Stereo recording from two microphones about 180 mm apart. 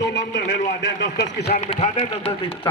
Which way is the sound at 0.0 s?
75° left (ahead or behind).